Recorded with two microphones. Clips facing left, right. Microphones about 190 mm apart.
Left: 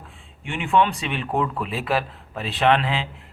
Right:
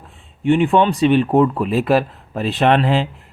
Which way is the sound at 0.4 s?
35° right (ahead or behind).